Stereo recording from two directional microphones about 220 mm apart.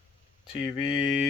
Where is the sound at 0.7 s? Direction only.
25° left (ahead or behind).